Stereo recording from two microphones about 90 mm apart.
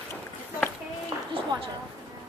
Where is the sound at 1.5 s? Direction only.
50° right (ahead or behind).